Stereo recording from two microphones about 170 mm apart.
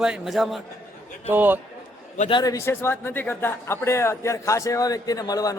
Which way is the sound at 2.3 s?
20° left (ahead or behind).